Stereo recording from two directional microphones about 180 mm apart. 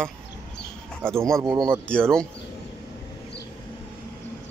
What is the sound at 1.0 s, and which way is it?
Speech, 15° right (ahead or behind).